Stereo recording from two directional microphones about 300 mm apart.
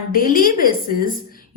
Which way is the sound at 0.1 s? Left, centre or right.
Left.